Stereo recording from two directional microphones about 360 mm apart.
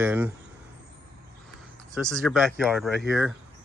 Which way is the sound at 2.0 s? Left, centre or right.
Centre.